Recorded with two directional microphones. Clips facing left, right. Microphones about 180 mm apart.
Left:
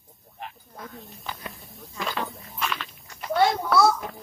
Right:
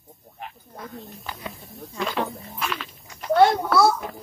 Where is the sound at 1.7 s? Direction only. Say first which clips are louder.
Right 4 dB; centre (ahead or behind).